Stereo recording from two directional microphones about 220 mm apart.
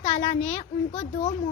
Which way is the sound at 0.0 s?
30° left (ahead or behind).